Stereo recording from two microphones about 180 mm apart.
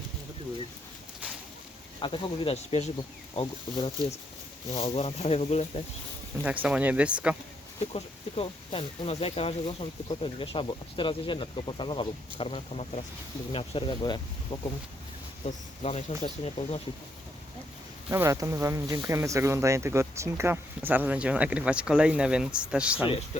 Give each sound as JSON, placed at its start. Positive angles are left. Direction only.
{"t": 2.0, "sound": "speech", "side_deg": 30}
{"t": 6.4, "sound": "speech", "side_deg": -5}
{"t": 7.9, "sound": "speech", "side_deg": 35}
{"t": 15.4, "sound": "speech", "side_deg": 40}
{"t": 18.1, "sound": "speech", "side_deg": -15}
{"t": 23.3, "sound": "speech", "side_deg": 40}